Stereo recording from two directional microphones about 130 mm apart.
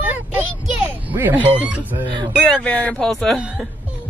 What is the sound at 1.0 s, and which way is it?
Speech, 15° right (ahead or behind).